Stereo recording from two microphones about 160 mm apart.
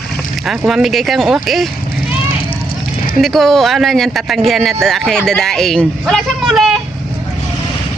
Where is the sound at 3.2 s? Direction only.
Centre (ahead or behind).